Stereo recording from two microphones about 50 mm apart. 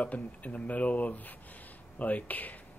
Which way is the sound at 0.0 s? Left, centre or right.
Left.